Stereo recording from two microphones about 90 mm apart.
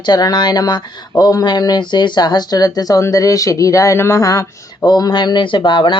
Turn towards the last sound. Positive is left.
turn(degrees=65)  # may be behind; listen again after turning